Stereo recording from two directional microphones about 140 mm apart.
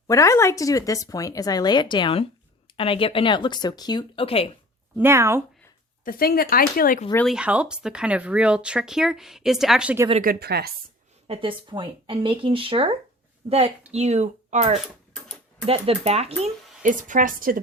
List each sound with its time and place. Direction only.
0.1 s speech: 20° left (ahead or behind); by 4.5 s 45° left (ahead or behind)
4.9 s speech: 20° right (ahead or behind)
6.1 s speech: 90° left
7.3 s speech: 5° right (ahead or behind)
10.2 s speech: 90° right
11.3 s a woman's voice: 40° right (ahead or behind)
16.8 s a woman's voice: 70° right (ahead or behind); by 17.6 s 85° right